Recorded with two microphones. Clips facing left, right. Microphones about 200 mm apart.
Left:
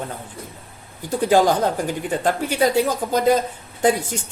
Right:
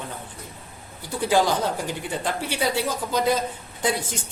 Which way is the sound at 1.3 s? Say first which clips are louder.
Left 4 dB; 50° left (ahead or behind).